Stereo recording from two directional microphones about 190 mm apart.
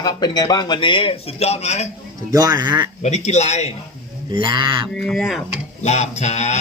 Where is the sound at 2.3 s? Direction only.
20° right (ahead or behind).